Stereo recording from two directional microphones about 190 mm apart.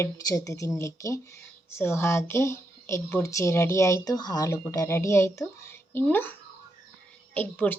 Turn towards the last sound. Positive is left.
turn(degrees=10)  # may be behind; listen again after turning